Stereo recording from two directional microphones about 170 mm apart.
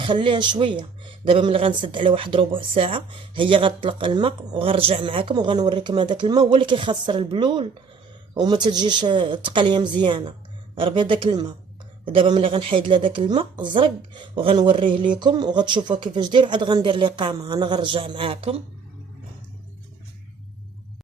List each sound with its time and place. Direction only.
0.0 s speech: 30° right (ahead or behind)